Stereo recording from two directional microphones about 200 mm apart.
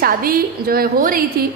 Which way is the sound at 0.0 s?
45° right (ahead or behind).